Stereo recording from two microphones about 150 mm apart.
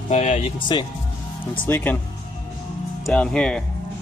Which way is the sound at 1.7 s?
15° left (ahead or behind).